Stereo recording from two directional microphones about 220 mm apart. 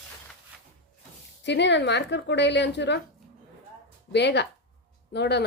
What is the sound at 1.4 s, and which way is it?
A woman's voice, 55° left (ahead or behind).